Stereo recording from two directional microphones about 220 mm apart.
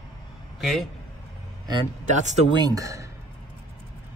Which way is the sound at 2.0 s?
35° right (ahead or behind).